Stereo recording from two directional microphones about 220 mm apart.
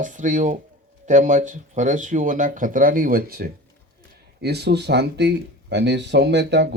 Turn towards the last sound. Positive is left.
turn(degrees=-50)  # may be behind; listen again after turning